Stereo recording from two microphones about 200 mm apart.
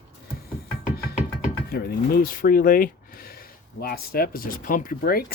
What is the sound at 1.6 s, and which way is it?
Speech, 50° left (ahead or behind).